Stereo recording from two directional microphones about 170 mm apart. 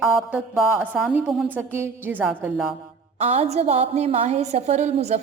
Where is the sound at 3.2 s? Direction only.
40° right (ahead or behind).